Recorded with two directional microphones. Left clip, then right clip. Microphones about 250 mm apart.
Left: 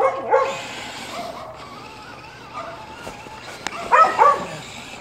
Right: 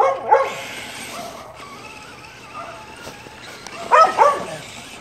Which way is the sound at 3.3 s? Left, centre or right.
Centre.